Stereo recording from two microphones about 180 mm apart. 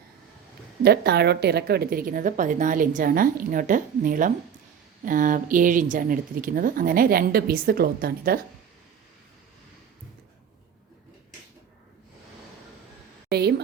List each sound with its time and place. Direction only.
0.8 s a woman's voice: 60° right (ahead or behind)